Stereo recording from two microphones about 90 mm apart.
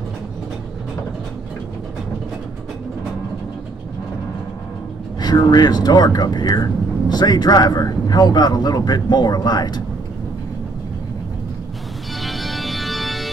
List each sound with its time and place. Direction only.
5.2 s speech: 50° left (ahead or behind)
12.2 s organ: centre (ahead or behind)